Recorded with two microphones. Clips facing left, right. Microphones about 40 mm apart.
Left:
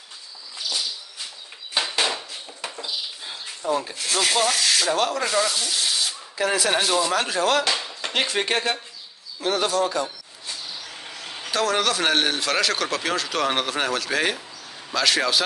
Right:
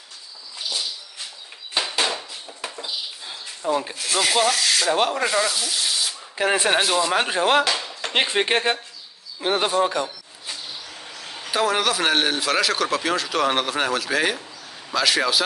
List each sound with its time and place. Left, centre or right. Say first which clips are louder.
1.7 s a sound: even; centre
3.6 s speech: right 1 dB; centre
3.9 s speech: right 1 dB; centre
4.9 s speech: right 2 dB; right
5.2 s speech: right 1 dB; centre
6.3 s speech: right 2 dB; right
6.7 s speech: right 2 dB; centre
7.1 s speech: right 2 dB; right
7.6 s speech: right 1 dB; centre
8.1 s speech: right 3 dB; right
10.0 s a sound: right 1 dB; centre
11.5 s speech: right 1 dB; centre